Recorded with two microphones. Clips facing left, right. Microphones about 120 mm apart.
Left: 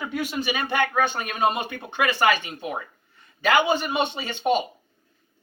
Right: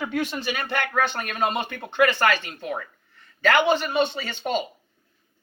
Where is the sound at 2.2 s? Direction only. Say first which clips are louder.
Left 1 dB; 15° left (ahead or behind).